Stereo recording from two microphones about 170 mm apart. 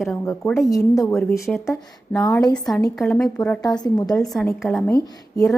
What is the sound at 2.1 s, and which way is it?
Speech, 20° left (ahead or behind).